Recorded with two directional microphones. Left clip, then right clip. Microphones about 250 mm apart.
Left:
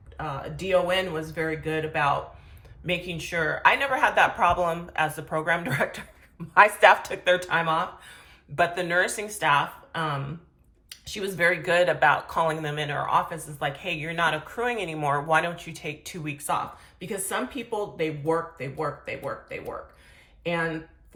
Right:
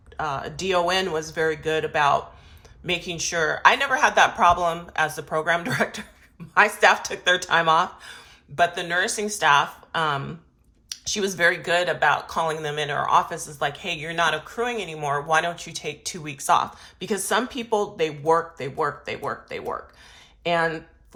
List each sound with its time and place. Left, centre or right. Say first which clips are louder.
0.2 s speech: right 5 dB; centre